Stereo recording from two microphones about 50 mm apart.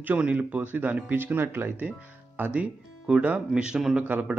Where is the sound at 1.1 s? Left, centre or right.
Right.